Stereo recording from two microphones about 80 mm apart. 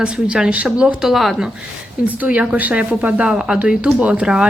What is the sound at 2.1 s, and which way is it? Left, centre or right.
A woman's voice, centre.